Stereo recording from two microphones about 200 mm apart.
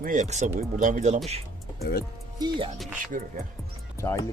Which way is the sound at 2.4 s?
25° right (ahead or behind).